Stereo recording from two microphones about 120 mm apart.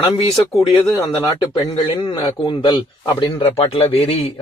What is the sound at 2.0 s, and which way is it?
A man's voice, 40° left (ahead or behind).